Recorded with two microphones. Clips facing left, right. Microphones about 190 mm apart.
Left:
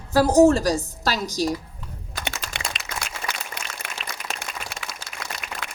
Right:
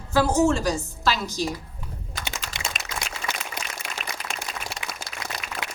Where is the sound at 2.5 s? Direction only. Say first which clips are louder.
Left 1 dB; 60° left (ahead or behind).